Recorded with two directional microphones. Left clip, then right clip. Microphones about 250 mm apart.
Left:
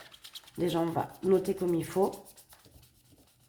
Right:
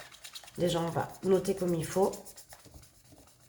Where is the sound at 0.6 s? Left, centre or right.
Left.